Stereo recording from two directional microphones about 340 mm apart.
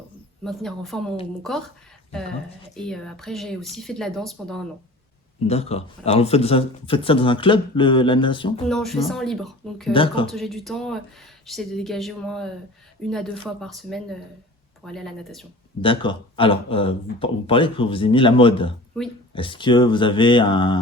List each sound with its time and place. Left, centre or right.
0.4 s speech: centre
2.7 s speech: centre
5.5 s speech: centre
8.6 s speech: centre
9.9 s speech: centre
10.3 s speech: centre
15.8 s speech: centre